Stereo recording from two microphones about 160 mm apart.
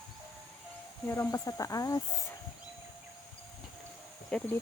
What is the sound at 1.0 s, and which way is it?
Speech, 15° left (ahead or behind).